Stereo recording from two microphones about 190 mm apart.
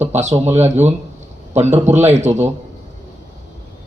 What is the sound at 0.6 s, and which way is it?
Speech, 35° right (ahead or behind).